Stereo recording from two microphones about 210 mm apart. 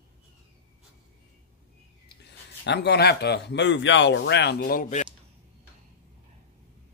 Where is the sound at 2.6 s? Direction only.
55° left (ahead or behind); by 5.1 s 35° left (ahead or behind).